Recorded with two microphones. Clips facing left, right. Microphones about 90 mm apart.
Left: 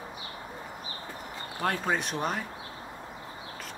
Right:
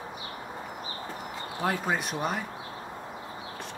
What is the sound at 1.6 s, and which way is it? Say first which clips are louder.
Speech: even; 5° right (ahead or behind).